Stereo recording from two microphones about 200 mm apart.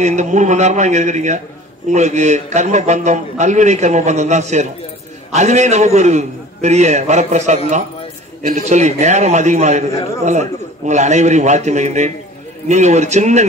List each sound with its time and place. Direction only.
0.0 s a man's voice: 35° right (ahead or behind)